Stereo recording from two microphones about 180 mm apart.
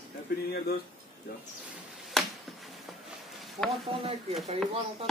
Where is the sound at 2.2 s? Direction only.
Centre (ahead or behind).